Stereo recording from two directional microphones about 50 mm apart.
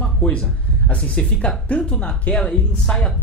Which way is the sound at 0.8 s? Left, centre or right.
Left.